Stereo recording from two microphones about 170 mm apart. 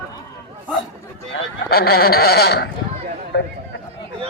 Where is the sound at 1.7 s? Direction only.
65° left (ahead or behind).